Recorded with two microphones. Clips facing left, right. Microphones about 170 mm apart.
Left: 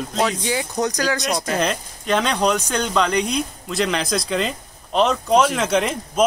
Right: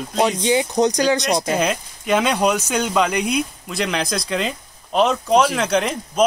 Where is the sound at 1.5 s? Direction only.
5° right (ahead or behind).